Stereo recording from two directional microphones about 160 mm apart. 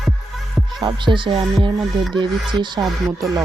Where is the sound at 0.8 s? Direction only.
30° right (ahead or behind).